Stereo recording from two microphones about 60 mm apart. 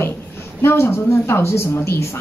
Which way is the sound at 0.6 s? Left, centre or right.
Left.